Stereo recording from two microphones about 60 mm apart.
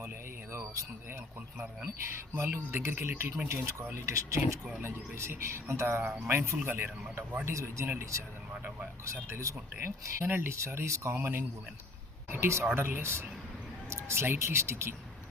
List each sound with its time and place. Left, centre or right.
0.5 s a sound: right
1.5 s speech: right
2.3 s a man's voice: right
3.5 s speech: right
4.8 s a man's voice: right
7.4 s speech: right
9.7 s speech: right
11.1 s a man's voice: right